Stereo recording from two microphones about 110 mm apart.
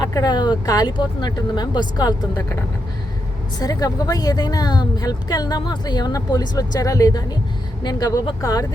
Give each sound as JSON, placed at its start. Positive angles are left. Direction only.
{"t": 0.0, "sound": "speech", "side_deg": 35}
{"t": 3.6, "sound": "speech", "side_deg": 35}